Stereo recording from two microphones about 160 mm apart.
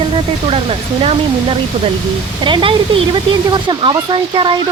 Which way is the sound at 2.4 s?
30° right (ahead or behind).